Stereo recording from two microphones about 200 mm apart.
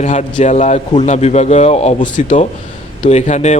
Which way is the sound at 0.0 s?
35° left (ahead or behind).